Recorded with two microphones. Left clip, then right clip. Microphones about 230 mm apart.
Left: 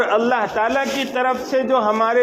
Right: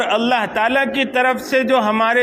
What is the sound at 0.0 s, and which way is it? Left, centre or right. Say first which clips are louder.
A man's voice: even; right.